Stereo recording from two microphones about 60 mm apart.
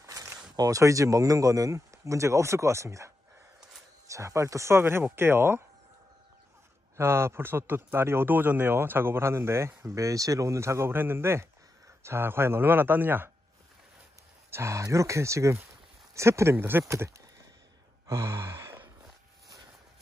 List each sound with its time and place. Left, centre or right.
0.0 s a sound: right
0.6 s speech: right
4.1 s speech: right
7.0 s speech: right
9.9 s speech: right
10.9 s speech: right
14.5 s speech: right
16.9 s speech: right
18.0 s sigh: right